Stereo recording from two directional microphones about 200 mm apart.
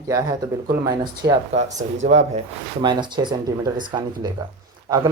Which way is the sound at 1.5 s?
35° right (ahead or behind).